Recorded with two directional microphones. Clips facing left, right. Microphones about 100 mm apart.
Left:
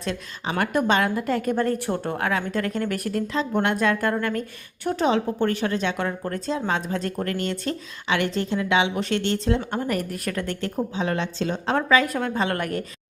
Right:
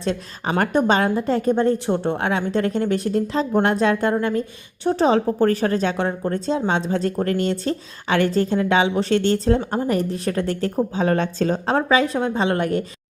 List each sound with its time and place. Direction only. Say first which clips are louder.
0.0 s a woman's voice: right 5 dB; 30° right (ahead or behind)